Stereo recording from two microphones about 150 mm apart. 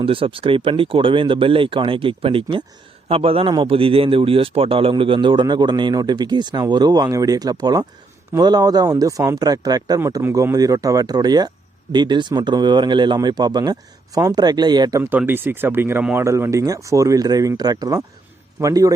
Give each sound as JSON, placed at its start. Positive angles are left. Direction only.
{"t": 0.0, "sound": "speech", "side_deg": -35}
{"t": 15.1, "sound": "speech", "side_deg": -15}